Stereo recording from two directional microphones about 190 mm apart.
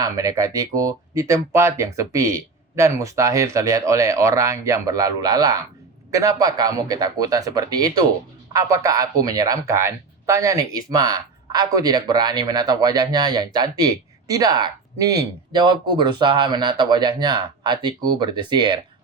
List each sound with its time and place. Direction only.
0.0 s speech: 20° right (ahead or behind)